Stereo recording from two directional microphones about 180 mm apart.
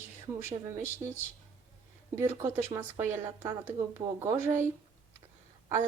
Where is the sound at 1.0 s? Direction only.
30° right (ahead or behind).